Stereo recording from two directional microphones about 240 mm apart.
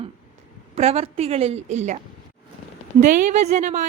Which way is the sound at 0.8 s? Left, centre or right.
Right.